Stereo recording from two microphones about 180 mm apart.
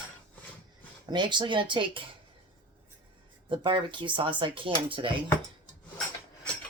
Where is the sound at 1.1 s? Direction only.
25° right (ahead or behind).